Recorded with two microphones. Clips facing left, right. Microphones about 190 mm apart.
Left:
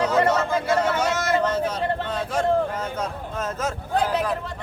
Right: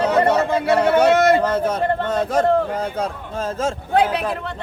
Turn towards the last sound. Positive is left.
turn(degrees=-65)  # may be behind; listen again after turning